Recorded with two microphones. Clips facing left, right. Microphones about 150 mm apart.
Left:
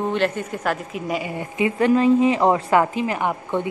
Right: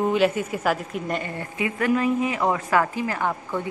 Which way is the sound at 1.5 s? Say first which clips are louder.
Left 5 dB; 25° left (ahead or behind).